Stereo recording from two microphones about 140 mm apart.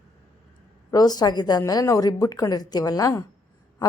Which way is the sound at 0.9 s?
30° left (ahead or behind).